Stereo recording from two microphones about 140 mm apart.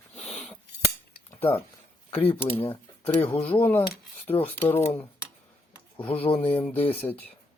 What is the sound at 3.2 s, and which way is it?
Speech, 10° left (ahead or behind).